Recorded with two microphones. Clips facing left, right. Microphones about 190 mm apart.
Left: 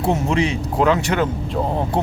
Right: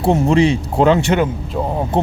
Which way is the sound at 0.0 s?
30° right (ahead or behind).